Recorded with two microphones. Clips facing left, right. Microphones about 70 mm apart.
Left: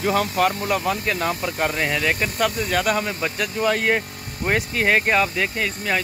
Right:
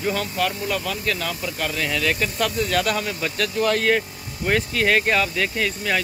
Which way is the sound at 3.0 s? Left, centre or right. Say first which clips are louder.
Even; centre.